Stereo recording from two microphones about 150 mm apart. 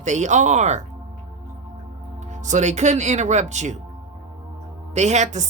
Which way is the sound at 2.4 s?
50° right (ahead or behind).